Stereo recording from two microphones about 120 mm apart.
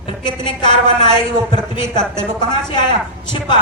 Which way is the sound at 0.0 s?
40° left (ahead or behind).